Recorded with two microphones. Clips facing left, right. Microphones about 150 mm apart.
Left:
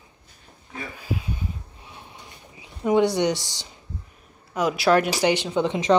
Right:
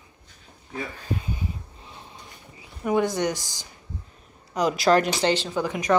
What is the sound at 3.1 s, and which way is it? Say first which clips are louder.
Speech: left 3 dB; 20° left (ahead or behind).